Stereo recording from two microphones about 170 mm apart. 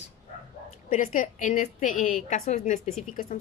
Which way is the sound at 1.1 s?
45° left (ahead or behind).